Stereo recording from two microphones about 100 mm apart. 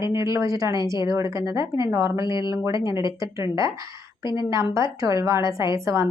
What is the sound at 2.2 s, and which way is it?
Speech, 50° left (ahead or behind).